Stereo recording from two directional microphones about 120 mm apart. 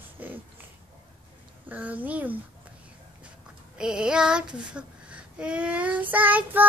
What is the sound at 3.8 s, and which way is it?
Child singing, 5° right (ahead or behind).